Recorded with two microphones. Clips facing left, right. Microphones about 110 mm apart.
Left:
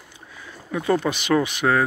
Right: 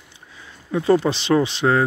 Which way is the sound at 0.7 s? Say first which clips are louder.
Right 4 dB; 30° right (ahead or behind).